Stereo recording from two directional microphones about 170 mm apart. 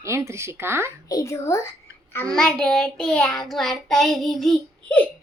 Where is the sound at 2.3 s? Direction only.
5° left (ahead or behind).